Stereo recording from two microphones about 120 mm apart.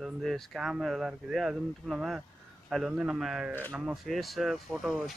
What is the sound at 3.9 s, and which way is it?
Speech, centre (ahead or behind).